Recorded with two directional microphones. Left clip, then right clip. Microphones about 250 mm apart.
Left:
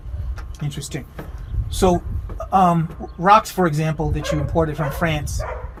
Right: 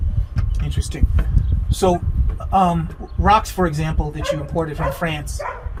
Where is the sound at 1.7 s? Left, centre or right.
Left.